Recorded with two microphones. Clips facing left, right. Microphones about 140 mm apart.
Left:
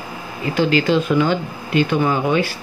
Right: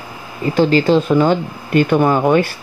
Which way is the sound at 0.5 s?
40° right (ahead or behind).